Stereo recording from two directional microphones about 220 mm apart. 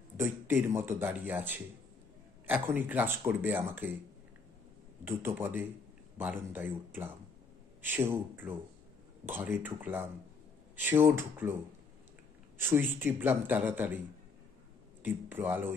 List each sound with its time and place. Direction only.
0.2 s speech: 10° right (ahead or behind)
2.6 s speech: 10° right (ahead or behind)
5.0 s speech: 10° right (ahead or behind)
11.1 s speech: 10° right (ahead or behind)
12.6 s speech: 10° right (ahead or behind)
15.0 s speech: 10° right (ahead or behind)